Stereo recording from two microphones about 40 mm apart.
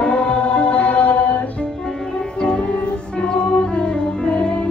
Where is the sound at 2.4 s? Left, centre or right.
Centre.